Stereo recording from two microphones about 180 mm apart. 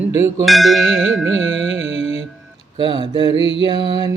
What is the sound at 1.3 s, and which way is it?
Carnatic music, 90° right.